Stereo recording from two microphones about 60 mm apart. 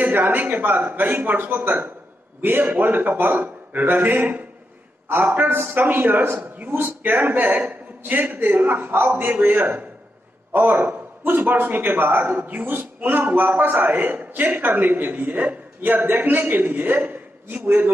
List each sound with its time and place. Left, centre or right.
0.0 s a man's voice: right